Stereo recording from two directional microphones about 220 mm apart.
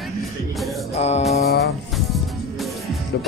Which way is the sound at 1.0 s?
30° left (ahead or behind).